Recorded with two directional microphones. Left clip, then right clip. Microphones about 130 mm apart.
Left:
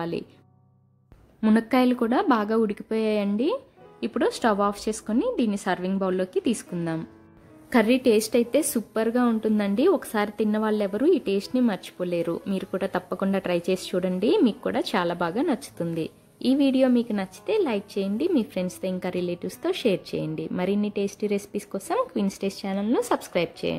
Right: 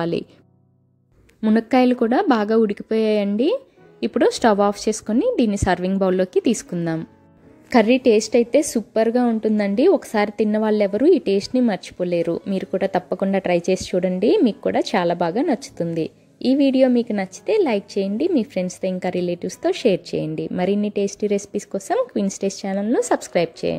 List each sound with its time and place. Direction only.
1.5 s a woman's voice: 20° right (ahead or behind)